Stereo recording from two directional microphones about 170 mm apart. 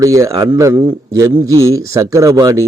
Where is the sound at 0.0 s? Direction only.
20° right (ahead or behind).